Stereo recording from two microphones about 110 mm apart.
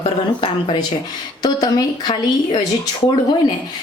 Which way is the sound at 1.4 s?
35° left (ahead or behind).